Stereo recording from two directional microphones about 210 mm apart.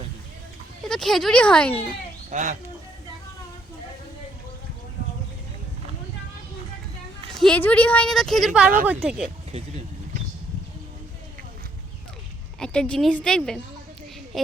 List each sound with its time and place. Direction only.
0.9 s a woman's voice: centre (ahead or behind)
2.3 s speech: 35° right (ahead or behind)
7.3 s a woman's voice: 5° left (ahead or behind)
9.5 s speech: 30° right (ahead or behind)
12.5 s a woman's voice: 5° left (ahead or behind)